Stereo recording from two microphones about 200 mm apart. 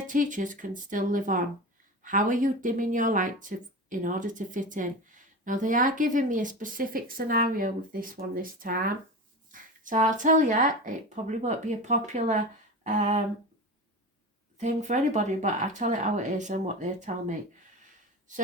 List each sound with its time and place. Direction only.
0.1 s speech: 40° right (ahead or behind)
12.8 s a sound: 40° right (ahead or behind)
14.6 s speech: 35° right (ahead or behind)